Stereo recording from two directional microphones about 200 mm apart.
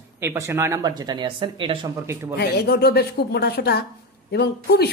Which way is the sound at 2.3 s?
55° left (ahead or behind).